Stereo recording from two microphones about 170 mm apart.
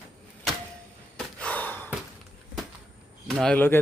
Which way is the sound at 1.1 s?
5° left (ahead or behind).